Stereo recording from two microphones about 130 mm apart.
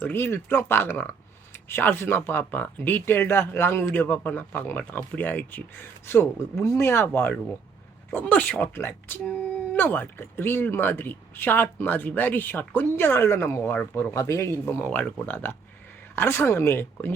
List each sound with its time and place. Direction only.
0.0 s a woman's voice: 15° left (ahead or behind)
14.6 s a woman's voice: 10° left (ahead or behind)